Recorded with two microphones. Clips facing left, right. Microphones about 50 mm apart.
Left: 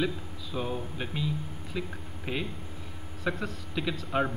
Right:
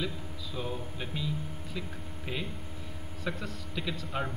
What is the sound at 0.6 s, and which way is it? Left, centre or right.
A man's voice, left.